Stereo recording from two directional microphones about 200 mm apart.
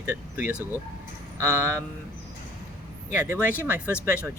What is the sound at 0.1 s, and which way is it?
Speech, 10° right (ahead or behind).